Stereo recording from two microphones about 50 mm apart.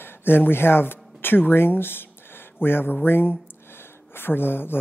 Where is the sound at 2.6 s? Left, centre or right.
Left.